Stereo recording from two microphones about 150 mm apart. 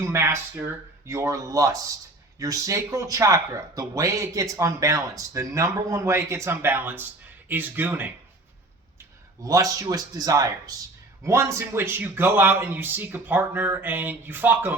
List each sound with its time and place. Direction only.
0.0 s speech: 20° right (ahead or behind)
9.4 s a man's voice: 25° right (ahead or behind)